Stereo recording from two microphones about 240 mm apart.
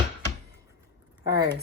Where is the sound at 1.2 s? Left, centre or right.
Centre.